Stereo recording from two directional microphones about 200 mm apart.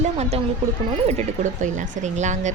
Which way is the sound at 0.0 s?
30° right (ahead or behind).